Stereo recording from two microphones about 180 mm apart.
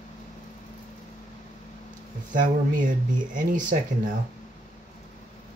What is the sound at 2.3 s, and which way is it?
Speech, 45° right (ahead or behind).